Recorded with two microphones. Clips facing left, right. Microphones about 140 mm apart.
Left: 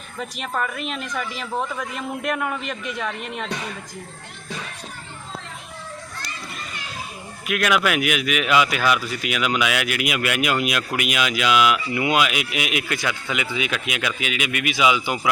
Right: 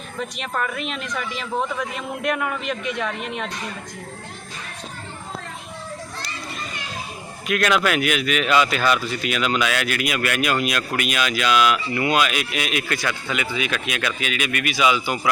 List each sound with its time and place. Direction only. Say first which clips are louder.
0.2 s a man's voice: even; centre (ahead or behind)
7.4 s speech: right 1 dB; 5° left (ahead or behind)